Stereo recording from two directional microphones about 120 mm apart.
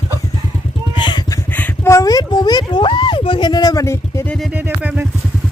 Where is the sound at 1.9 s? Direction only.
30° left (ahead or behind); by 3.5 s 45° left (ahead or behind).